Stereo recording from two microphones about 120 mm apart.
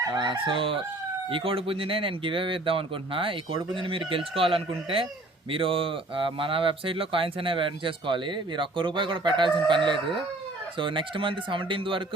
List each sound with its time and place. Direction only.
0.0 s speech: 35° right (ahead or behind)